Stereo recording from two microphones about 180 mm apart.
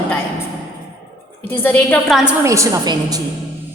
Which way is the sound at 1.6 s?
10° left (ahead or behind).